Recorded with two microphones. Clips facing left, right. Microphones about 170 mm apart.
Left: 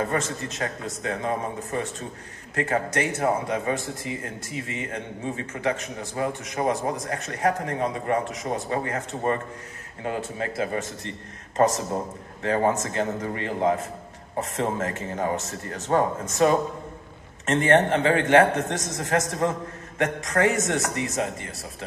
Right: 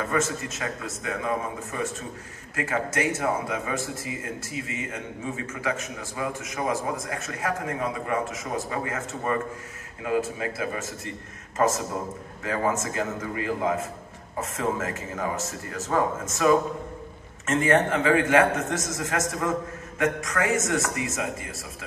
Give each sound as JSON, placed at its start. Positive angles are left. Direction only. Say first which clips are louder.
{"t": 0.0, "sound": "a man's voice", "louder": "even", "side_deg": 35}
{"t": 5.2, "sound": "a man's voice", "louder": "left 3 dB", "side_deg": 35}